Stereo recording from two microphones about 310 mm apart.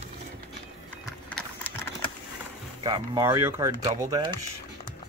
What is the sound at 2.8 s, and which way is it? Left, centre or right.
Speech, centre.